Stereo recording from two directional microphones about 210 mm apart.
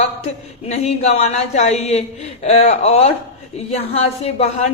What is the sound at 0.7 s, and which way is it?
Speech, 30° left (ahead or behind).